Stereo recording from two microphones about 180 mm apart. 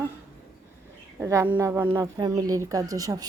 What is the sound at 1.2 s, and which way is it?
A woman's voice, 15° right (ahead or behind).